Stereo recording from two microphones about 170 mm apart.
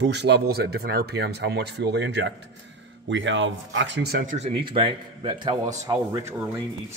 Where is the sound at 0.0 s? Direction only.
85° right; by 4.3 s 70° right (ahead or behind).